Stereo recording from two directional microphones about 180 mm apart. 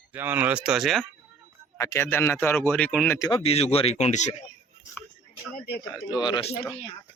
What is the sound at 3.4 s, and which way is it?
Speech, 35° left (ahead or behind).